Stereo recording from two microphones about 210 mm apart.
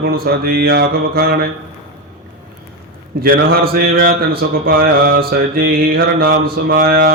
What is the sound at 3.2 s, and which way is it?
Mantra, 45° right (ahead or behind).